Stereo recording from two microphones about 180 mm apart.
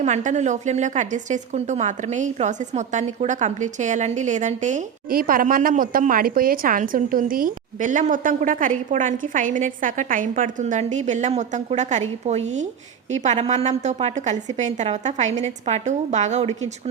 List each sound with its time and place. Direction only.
0.0 s a woman's voice: 40° right (ahead or behind)